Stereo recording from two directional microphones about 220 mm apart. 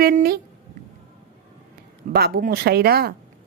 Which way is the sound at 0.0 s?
40° right (ahead or behind).